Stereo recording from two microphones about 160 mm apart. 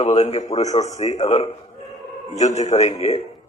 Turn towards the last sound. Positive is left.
turn(degrees=45)  # may be behind; listen again after turning